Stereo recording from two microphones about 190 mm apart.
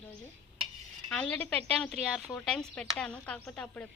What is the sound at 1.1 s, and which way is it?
Speech, 5° left (ahead or behind).